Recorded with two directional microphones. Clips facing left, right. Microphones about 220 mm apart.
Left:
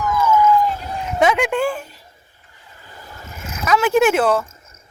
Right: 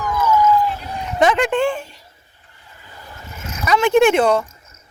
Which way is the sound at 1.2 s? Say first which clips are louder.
Right 1 dB; 5° left (ahead or behind).